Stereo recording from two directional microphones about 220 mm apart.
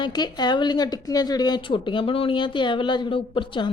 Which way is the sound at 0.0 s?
20° left (ahead or behind).